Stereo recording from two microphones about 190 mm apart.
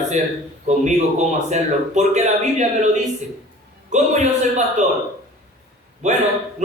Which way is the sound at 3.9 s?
40° right (ahead or behind).